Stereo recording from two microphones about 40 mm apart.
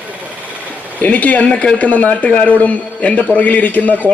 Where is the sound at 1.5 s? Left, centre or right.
Left.